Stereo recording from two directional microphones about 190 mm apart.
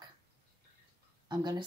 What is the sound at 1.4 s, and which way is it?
Speech, 20° right (ahead or behind).